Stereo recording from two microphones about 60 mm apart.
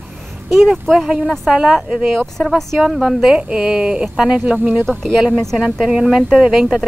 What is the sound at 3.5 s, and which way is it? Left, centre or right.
Speech, centre.